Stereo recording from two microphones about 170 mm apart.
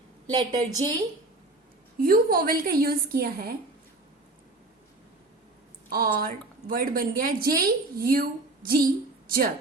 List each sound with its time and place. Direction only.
0.3 s a woman's voice: 25° right (ahead or behind)
2.0 s a woman's voice: 60° right (ahead or behind)
6.1 s a woman's voice: 60° right (ahead or behind)